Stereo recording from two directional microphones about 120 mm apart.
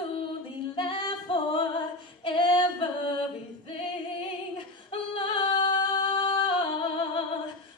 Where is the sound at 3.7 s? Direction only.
45° left (ahead or behind).